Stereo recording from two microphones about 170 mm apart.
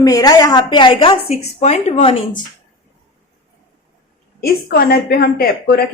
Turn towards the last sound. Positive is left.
turn(degrees=60)  # may be behind; listen again after turning